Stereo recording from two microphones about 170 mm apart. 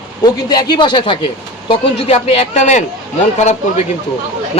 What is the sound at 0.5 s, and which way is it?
Speech, 25° left (ahead or behind).